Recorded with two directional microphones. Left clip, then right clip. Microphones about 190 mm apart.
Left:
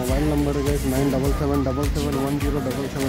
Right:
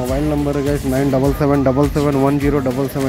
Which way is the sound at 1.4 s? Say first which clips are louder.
Right 9 dB; 30° right (ahead or behind).